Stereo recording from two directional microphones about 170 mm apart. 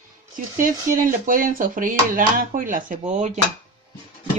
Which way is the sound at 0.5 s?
50° right (ahead or behind).